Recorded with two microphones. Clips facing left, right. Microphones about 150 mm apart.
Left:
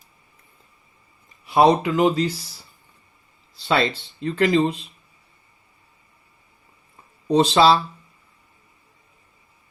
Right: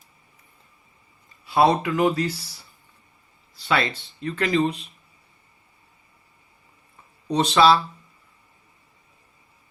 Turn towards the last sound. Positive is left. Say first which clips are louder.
# left 2 dB
turn(degrees=25)  # may be behind; listen again after turning